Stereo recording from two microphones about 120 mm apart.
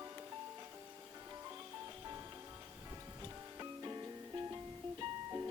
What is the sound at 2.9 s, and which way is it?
Music, 30° right (ahead or behind).